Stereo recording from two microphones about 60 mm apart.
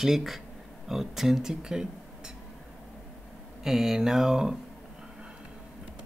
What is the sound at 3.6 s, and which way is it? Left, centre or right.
Speech, centre.